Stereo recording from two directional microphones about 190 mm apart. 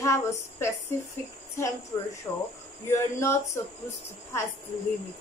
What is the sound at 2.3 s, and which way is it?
A woman's voice, 15° left (ahead or behind).